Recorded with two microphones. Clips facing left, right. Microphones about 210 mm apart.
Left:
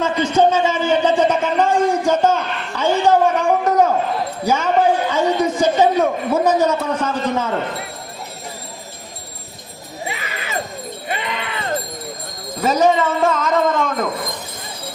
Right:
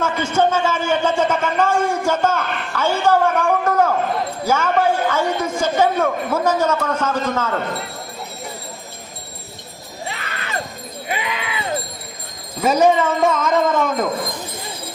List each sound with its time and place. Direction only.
0.0 s a man's voice: 15° left (ahead or behind)
10.1 s a sound: 5° left (ahead or behind)
11.1 s a man's voice: 5° right (ahead or behind)
12.6 s a man's voice: centre (ahead or behind)